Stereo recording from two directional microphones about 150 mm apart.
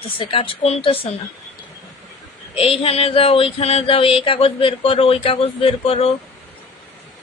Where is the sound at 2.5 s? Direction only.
40° left (ahead or behind).